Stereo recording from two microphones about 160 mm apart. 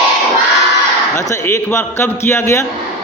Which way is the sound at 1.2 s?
15° left (ahead or behind).